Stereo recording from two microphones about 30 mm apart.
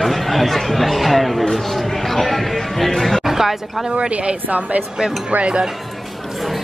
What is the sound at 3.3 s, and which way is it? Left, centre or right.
Speech, centre.